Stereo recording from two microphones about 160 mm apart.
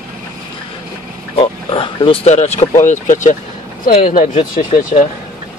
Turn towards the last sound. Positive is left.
turn(degrees=55)  # may be behind; listen again after turning